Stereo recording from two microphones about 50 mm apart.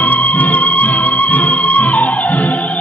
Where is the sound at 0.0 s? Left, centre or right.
Left.